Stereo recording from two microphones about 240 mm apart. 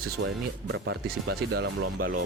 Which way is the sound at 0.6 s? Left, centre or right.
Right.